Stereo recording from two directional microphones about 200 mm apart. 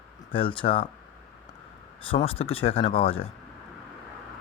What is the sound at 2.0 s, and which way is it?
Speech, 30° left (ahead or behind).